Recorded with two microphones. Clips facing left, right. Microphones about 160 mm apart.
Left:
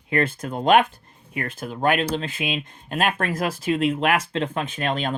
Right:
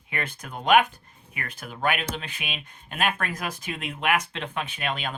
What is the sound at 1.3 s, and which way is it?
Speech, 40° left (ahead or behind).